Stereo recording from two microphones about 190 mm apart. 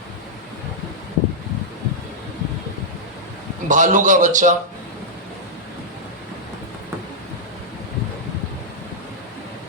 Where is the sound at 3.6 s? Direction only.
40° right (ahead or behind).